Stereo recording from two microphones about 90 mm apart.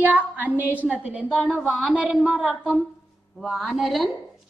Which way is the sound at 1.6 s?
Centre (ahead or behind).